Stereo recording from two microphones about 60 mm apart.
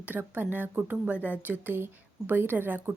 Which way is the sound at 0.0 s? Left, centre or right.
Right.